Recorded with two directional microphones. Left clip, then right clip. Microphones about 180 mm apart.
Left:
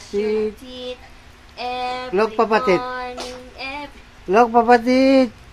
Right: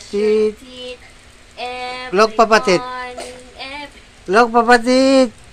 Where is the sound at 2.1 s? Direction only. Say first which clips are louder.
Right 6 dB; 10° right (ahead or behind).